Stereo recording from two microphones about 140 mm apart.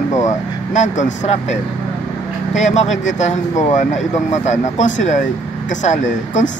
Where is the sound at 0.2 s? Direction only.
60° left (ahead or behind).